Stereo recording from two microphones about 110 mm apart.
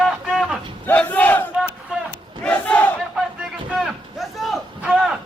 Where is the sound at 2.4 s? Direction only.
10° left (ahead or behind).